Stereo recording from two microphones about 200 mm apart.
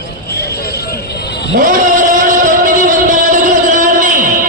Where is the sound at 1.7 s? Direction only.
40° right (ahead or behind).